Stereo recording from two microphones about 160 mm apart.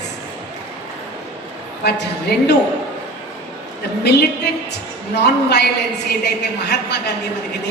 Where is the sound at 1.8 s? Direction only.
90° left.